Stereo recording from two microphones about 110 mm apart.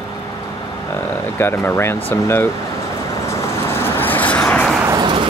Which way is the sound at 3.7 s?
20° left (ahead or behind).